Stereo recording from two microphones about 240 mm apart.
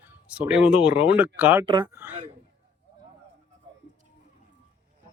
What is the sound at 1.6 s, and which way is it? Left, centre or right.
Speech, centre.